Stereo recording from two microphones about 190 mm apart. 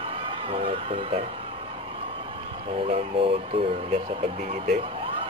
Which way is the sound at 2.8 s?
30° right (ahead or behind).